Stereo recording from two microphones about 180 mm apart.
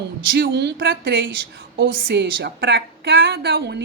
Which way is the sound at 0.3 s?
65° right (ahead or behind).